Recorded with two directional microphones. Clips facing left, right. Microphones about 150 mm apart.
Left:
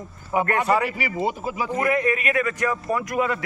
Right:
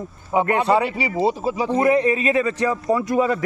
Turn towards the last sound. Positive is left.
turn(degrees=-30)  # may be behind; listen again after turning